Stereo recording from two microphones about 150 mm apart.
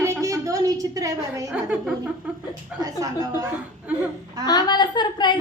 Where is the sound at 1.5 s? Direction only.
10° right (ahead or behind).